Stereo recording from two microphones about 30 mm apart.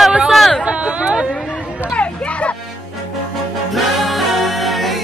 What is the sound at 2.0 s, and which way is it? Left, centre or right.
Music, left.